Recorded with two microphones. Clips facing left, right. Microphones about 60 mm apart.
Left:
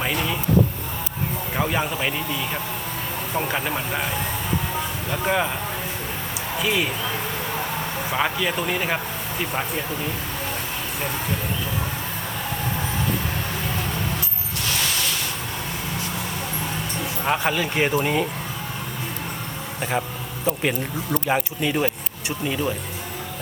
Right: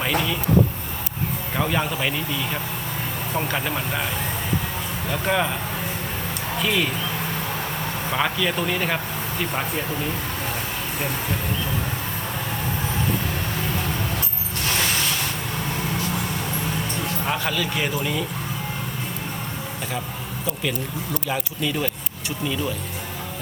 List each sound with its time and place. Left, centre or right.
1.5 s speech: centre
5.1 s speech: centre
6.6 s speech: centre
8.1 s speech: centre
17.2 s speech: left
20.6 s speech: left